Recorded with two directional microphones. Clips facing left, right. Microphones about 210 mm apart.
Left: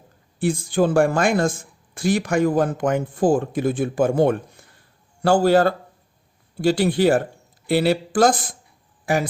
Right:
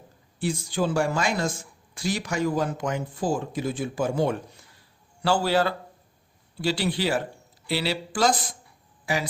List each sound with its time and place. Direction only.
0.3 s speech: 50° left (ahead or behind)